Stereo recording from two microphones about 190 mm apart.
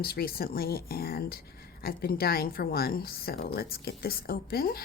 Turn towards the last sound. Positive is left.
turn(degrees=55)  # may be behind; listen again after turning